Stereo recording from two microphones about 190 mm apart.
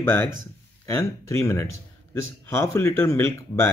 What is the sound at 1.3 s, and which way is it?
Speech, 15° left (ahead or behind).